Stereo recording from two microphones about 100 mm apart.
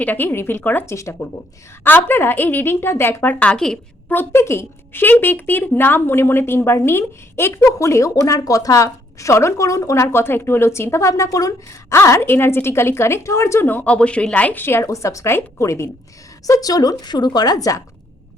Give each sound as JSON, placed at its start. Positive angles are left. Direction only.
{"t": 0.0, "sound": "speech", "side_deg": 20}
{"t": 3.3, "sound": "a woman's voice", "side_deg": 10}
{"t": 4.1, "sound": "a woman's voice", "side_deg": 20}